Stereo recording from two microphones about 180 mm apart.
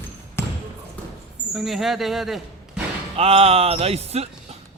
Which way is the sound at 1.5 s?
Centre (ahead or behind).